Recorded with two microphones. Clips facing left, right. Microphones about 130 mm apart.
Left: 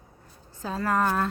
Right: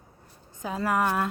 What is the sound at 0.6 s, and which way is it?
Speech, 15° right (ahead or behind).